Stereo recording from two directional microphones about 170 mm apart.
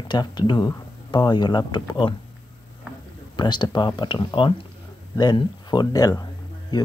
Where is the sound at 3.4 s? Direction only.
25° left (ahead or behind).